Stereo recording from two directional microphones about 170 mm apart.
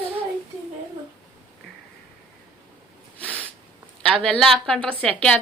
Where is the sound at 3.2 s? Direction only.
10° left (ahead or behind).